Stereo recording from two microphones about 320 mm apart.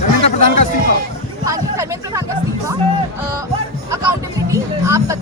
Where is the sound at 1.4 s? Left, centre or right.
Centre.